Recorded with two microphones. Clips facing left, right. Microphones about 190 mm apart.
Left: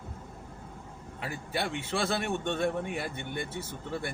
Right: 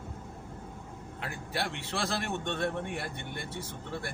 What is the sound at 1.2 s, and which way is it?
A man's voice, centre (ahead or behind).